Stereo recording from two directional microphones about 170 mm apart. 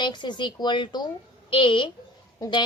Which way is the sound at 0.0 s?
25° left (ahead or behind).